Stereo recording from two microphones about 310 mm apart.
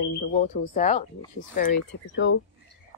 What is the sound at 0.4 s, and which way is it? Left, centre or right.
Speech, left.